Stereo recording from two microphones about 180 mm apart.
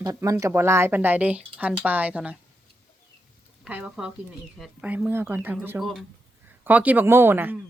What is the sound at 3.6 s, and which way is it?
Speech, 5° right (ahead or behind).